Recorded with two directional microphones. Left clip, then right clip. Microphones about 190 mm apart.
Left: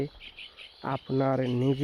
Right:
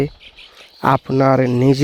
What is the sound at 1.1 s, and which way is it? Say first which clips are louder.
Speech: right 13 dB; 65° right (ahead or behind).